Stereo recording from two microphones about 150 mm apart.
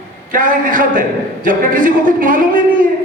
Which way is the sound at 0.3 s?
65° right (ahead or behind).